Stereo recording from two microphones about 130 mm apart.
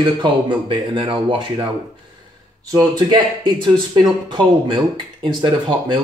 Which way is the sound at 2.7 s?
30° right (ahead or behind).